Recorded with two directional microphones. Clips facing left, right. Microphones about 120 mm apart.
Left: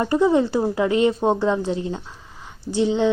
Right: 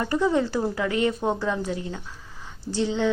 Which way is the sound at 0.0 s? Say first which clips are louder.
Left 5 dB; 20° left (ahead or behind).